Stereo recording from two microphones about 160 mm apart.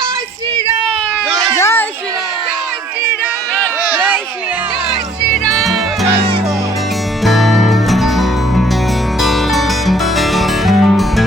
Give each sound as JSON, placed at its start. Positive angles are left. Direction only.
{"t": 1.5, "sound": "children playing", "side_deg": 15}
{"t": 5.5, "sound": "music", "side_deg": 0}
{"t": 7.3, "sound": "music", "side_deg": 0}